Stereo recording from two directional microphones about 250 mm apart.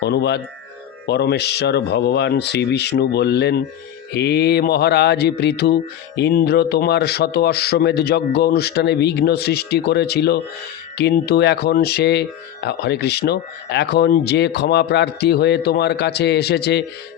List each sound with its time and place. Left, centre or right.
0.0 s mantra: left